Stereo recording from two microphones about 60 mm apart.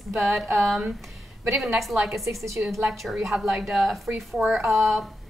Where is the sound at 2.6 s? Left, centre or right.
Right.